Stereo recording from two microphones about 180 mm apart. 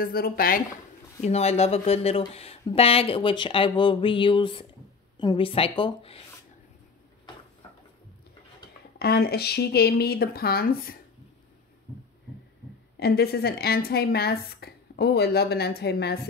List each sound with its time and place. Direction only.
0.0 s a woman's voice: 55° left (ahead or behind)
1.2 s speech: 35° left (ahead or behind)
8.9 s a woman's voice: 60° left (ahead or behind)
13.0 s a woman's voice: 60° left (ahead or behind)